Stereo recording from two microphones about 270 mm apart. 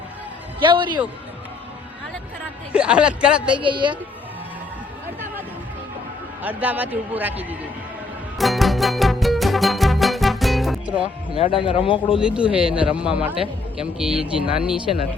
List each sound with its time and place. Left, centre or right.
0.6 s a woman's voice: centre
2.7 s a man's voice: centre
3.5 s a woman's voice: centre
6.4 s a man's voice: centre
8.4 s music: centre
11.3 s speech: centre
12.2 s a man's voice: centre